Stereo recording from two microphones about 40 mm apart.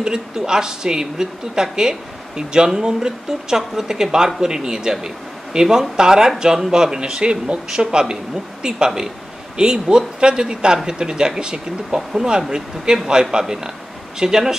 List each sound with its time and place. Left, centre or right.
0.0 s speech: centre